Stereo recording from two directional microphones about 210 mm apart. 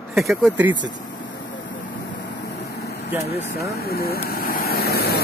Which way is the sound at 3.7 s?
45° left (ahead or behind).